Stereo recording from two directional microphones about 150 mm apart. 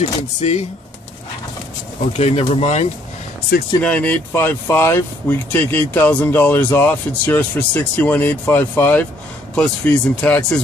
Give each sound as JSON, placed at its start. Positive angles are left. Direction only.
{"t": 0.0, "sound": "speech", "side_deg": 45}
{"t": 2.1, "sound": "speech", "side_deg": 45}
{"t": 3.8, "sound": "speech", "side_deg": 10}